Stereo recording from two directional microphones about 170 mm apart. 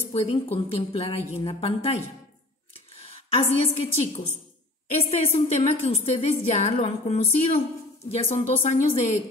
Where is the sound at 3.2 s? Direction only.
35° left (ahead or behind).